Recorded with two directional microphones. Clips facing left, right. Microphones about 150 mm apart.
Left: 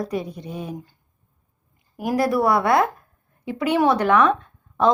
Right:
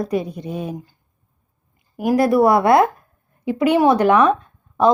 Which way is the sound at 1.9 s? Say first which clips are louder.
Right 5 dB; 15° right (ahead or behind).